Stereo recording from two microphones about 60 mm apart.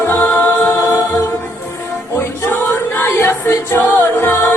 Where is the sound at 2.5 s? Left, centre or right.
Left.